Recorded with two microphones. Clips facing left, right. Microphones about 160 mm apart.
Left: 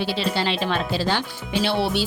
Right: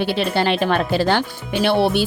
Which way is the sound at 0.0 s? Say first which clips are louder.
Right 5 dB; 55° right (ahead or behind).